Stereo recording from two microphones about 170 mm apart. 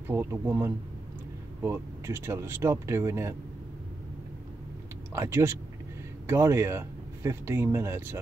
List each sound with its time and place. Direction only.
0.1 s speech: 15° right (ahead or behind)
5.1 s speech: 15° right (ahead or behind)